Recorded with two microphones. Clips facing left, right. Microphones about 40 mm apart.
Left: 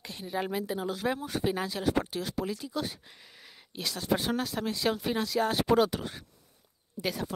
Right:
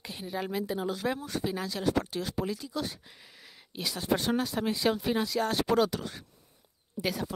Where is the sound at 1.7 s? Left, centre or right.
Centre.